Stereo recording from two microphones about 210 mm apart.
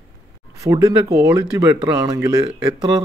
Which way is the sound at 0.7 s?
15° right (ahead or behind).